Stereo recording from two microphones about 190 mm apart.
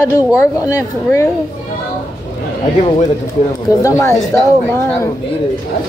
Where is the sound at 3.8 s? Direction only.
15° left (ahead or behind).